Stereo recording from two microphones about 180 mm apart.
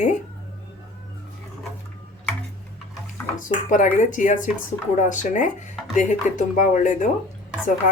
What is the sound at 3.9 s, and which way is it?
A woman's voice, 45° left (ahead or behind).